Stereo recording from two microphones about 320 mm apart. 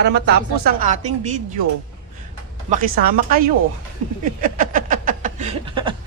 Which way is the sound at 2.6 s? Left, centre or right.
Right.